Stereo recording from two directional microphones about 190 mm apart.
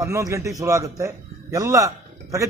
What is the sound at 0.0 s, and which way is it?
A man's voice, 15° right (ahead or behind).